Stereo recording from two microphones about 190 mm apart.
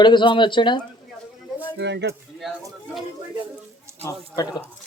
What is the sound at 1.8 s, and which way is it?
Speech, 65° right (ahead or behind).